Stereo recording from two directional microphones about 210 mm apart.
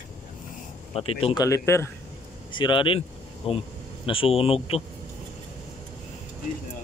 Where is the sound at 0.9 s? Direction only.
25° left (ahead or behind).